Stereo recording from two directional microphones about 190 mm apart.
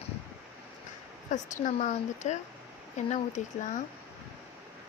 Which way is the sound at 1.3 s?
40° left (ahead or behind).